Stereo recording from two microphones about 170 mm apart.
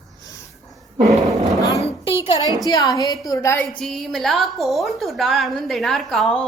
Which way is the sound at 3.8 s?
Centre (ahead or behind).